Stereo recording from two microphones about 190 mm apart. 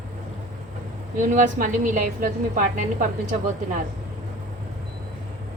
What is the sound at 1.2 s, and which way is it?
A woman's voice, 40° right (ahead or behind).